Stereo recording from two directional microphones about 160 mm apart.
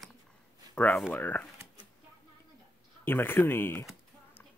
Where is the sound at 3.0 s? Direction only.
15° left (ahead or behind).